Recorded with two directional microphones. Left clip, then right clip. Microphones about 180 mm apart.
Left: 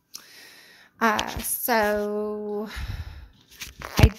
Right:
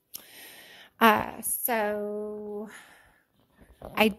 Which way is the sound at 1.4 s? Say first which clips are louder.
Left 6 dB; centre (ahead or behind).